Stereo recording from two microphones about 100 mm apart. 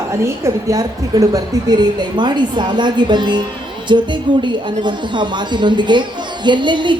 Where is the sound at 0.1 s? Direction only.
30° right (ahead or behind).